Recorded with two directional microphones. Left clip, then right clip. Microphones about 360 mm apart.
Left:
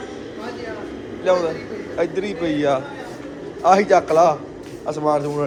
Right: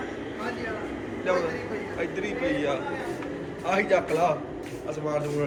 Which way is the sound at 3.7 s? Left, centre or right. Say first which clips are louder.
Left 9 dB; left.